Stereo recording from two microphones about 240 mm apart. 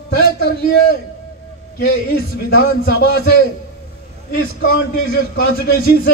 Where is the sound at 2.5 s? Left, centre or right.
Left.